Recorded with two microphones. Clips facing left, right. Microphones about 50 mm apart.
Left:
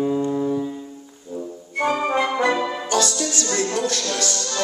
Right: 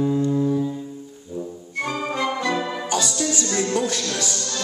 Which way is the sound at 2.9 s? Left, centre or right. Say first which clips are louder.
Left 2 dB; centre.